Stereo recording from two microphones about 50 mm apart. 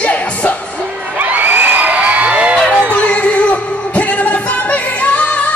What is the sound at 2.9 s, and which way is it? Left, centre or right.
Music, left.